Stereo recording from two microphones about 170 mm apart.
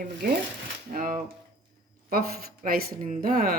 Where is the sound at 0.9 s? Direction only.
55° right (ahead or behind).